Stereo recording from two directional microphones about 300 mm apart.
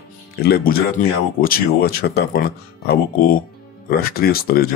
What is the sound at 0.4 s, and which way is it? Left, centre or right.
Speech, left.